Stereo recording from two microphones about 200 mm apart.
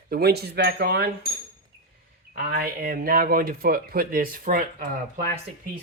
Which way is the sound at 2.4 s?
50° right (ahead or behind).